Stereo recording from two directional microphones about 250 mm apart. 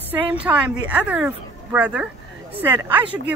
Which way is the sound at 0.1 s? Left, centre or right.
Centre.